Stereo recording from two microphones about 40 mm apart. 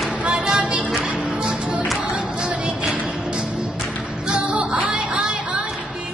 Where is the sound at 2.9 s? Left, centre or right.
Right.